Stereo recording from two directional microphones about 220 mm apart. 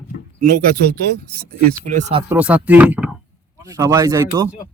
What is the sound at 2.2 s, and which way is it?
Speech, 5° right (ahead or behind).